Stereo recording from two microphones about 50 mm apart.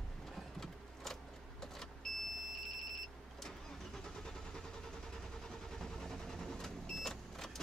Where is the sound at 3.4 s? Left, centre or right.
Centre.